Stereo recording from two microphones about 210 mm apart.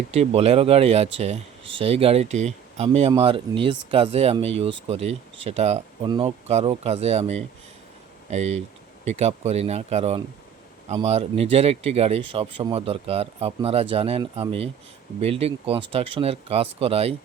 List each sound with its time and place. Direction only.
0.1 s speech: 30° right (ahead or behind)